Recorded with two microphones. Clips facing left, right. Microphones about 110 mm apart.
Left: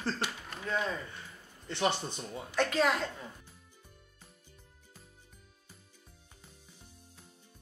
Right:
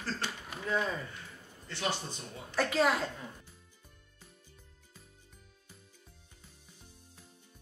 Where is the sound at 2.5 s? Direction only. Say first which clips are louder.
Even; 5° right (ahead or behind).